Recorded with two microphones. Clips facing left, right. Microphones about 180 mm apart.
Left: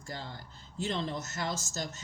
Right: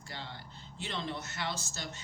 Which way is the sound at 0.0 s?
40° left (ahead or behind).